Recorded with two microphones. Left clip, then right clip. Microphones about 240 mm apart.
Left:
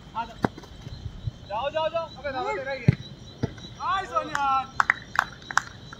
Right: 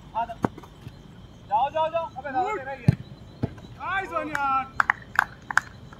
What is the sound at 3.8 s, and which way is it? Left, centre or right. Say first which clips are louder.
Speech: left 1 dB; right.